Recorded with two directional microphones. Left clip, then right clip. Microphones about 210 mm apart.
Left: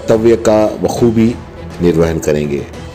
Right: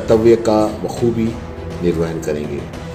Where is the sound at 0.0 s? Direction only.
40° left (ahead or behind).